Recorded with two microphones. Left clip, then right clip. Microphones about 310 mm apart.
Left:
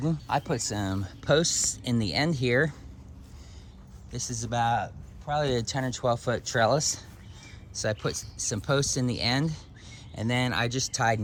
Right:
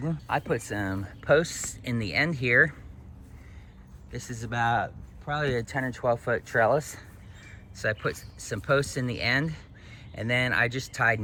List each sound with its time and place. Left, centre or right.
0.0 s speech: centre
4.1 s speech: centre
5.4 s speech: centre
10.5 s speech: centre